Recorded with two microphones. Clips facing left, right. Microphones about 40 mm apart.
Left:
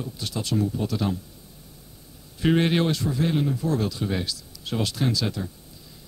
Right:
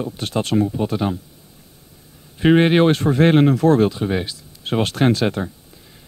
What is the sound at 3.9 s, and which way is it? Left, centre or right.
Speech, right.